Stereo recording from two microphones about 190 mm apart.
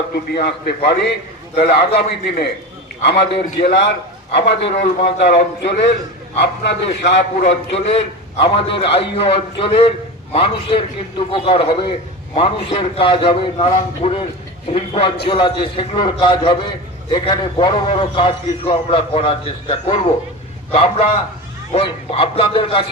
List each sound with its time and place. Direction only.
0.1 s a man's voice: 55° left (ahead or behind)
3.6 s a man's voice: 55° left (ahead or behind)
7.7 s a man's voice: 35° left (ahead or behind)